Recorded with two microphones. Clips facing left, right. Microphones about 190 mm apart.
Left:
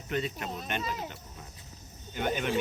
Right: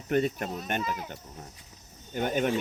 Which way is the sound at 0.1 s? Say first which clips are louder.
Right 6 dB; 50° right (ahead or behind).